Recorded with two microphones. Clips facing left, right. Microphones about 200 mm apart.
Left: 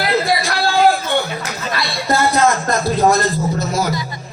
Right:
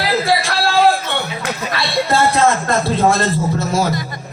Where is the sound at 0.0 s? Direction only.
30° right (ahead or behind).